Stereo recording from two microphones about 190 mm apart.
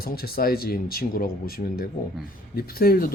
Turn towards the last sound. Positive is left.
turn(degrees=50)  # may be behind; listen again after turning